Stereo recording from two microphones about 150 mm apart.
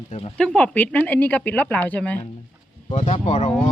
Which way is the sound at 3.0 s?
45° left (ahead or behind).